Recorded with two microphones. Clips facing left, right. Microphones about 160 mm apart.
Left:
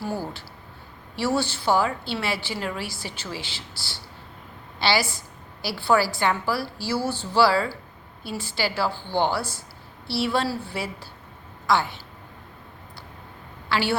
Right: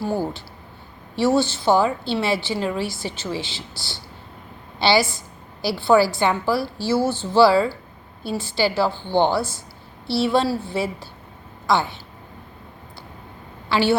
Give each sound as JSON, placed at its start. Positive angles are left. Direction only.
{"t": 0.0, "sound": "a sound", "side_deg": -20}
{"t": 1.2, "sound": "a woman's voice", "side_deg": -25}
{"t": 4.8, "sound": "a woman's voice", "side_deg": -25}
{"t": 13.7, "sound": "a woman's voice", "side_deg": -25}